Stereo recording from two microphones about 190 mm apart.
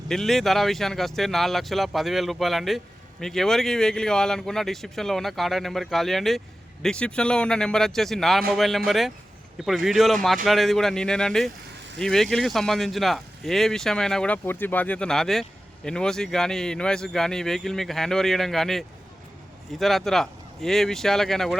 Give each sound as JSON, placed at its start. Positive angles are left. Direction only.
{"t": 0.1, "sound": "speech", "side_deg": 0}